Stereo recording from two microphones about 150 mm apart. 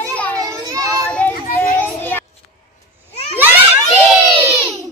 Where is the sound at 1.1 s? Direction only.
10° left (ahead or behind).